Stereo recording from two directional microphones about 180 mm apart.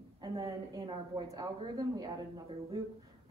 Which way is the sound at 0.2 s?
20° right (ahead or behind).